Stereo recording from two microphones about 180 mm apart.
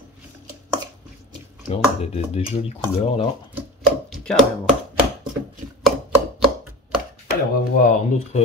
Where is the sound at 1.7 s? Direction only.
35° left (ahead or behind).